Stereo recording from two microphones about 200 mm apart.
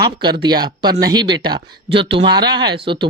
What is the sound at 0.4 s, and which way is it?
Speech, 20° right (ahead or behind).